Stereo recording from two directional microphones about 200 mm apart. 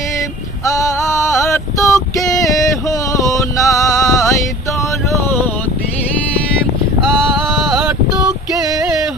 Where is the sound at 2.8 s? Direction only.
15° left (ahead or behind).